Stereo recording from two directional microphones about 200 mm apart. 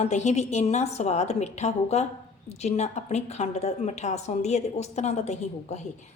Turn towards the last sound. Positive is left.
turn(degrees=35)  # may be behind; listen again after turning